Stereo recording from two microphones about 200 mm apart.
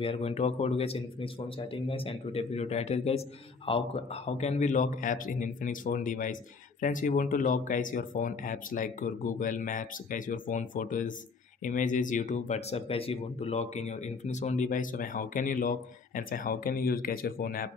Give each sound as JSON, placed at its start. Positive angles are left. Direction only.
{"t": 0.0, "sound": "speech", "side_deg": 30}